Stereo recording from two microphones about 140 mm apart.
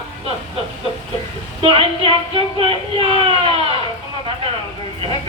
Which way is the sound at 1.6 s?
40° right (ahead or behind).